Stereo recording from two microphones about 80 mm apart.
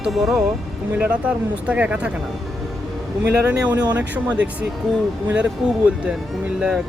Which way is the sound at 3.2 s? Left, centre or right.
Centre.